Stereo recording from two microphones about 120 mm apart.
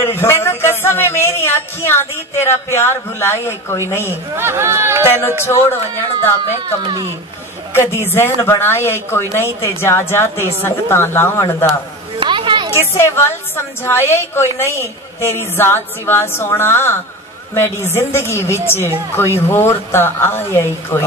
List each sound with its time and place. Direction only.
0.1 s speech: 20° left (ahead or behind)
4.4 s speech: 20° right (ahead or behind)
5.0 s speech: 20° left (ahead or behind)
7.7 s speech: 20° left (ahead or behind)
12.2 s a sound: 45° right (ahead or behind)
12.7 s speech: 20° left (ahead or behind)